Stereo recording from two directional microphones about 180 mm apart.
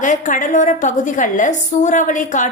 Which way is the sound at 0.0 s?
45° left (ahead or behind).